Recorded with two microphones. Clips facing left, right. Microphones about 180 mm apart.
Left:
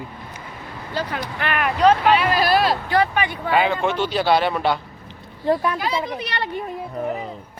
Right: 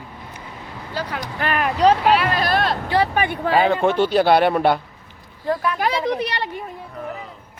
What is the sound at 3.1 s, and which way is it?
Speech, 50° right (ahead or behind).